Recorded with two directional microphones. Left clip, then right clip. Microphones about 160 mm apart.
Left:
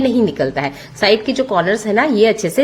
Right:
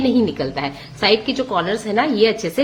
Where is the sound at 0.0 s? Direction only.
40° left (ahead or behind).